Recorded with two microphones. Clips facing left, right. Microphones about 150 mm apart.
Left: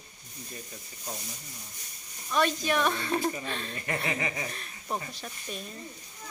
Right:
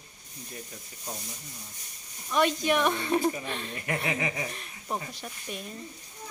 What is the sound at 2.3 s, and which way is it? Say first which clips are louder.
A woman's voice: right 2 dB; 15° right (ahead or behind).